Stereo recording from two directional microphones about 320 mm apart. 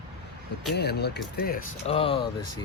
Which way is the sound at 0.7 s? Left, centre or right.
Left.